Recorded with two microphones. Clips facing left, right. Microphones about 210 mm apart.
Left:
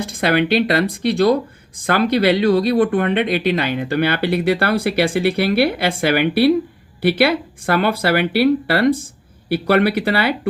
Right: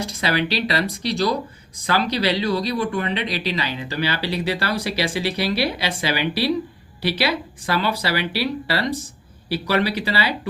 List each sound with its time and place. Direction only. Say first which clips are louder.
0.0 s speech: left 5 dB; 55° left (ahead or behind)